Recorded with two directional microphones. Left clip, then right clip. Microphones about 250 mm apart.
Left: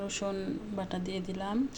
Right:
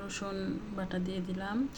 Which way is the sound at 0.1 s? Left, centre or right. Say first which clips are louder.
Left 3 dB; centre.